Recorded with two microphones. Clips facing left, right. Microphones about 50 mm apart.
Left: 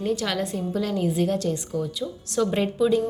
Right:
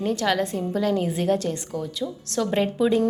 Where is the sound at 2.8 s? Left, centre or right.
Centre.